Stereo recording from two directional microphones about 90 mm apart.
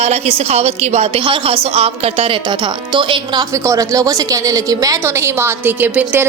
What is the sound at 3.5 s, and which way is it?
A woman's voice, 35° right (ahead or behind).